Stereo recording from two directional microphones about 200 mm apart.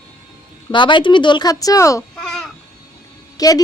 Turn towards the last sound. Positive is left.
turn(degrees=20)  # may be behind; listen again after turning